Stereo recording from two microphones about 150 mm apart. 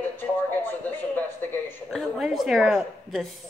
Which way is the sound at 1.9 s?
Centre (ahead or behind).